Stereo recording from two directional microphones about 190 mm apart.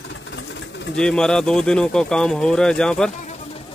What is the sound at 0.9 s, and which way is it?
Speech, 5° left (ahead or behind).